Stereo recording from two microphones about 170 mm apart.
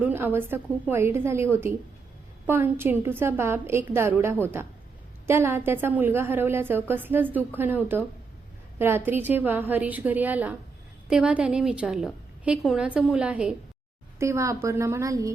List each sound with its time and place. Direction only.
0.0 s a woman's voice: 10° right (ahead or behind)
14.2 s a woman's voice: 15° right (ahead or behind)